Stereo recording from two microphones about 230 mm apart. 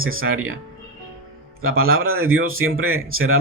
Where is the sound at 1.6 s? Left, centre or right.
Right.